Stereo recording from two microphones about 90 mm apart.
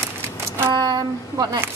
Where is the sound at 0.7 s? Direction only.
50° right (ahead or behind).